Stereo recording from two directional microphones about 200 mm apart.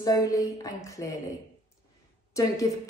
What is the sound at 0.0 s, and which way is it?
A woman's voice, 15° left (ahead or behind).